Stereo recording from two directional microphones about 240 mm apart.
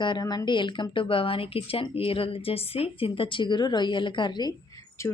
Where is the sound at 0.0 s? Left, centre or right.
Centre.